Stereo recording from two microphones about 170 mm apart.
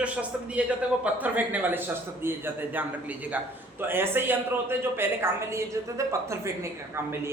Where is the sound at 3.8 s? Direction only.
15° right (ahead or behind).